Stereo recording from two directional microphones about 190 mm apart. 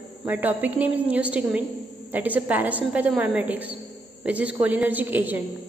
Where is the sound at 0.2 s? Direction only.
10° right (ahead or behind).